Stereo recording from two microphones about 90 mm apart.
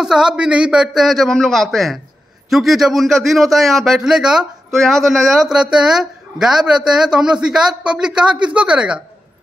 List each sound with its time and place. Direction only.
0.0 s a man's voice: 5° right (ahead or behind)